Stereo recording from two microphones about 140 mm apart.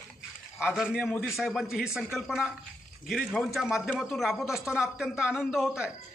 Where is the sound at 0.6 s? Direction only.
5° right (ahead or behind).